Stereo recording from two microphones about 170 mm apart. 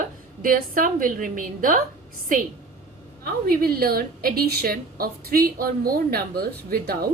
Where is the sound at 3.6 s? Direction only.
60° right (ahead or behind).